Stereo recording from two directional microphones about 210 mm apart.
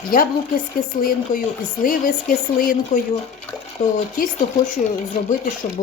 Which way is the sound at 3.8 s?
40° left (ahead or behind).